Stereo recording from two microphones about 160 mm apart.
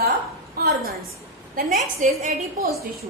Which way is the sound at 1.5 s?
60° right (ahead or behind).